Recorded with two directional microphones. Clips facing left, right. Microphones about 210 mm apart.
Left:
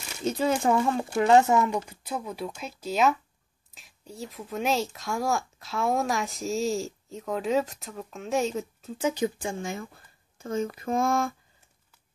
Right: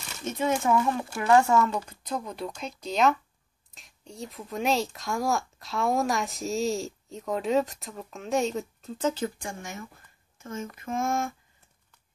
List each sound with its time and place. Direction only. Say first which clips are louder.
0.2 s speech: left 2 dB; 30° left (ahead or behind)